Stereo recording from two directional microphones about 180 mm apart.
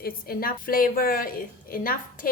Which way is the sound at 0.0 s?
55° left (ahead or behind).